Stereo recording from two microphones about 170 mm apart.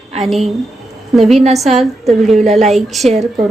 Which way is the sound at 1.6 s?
Centre (ahead or behind).